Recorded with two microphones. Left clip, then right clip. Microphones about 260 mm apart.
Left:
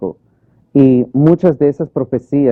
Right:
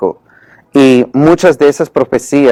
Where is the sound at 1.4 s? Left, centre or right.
Centre.